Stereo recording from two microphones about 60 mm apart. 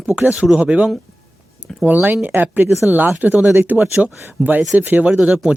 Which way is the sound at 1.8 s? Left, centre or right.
Right.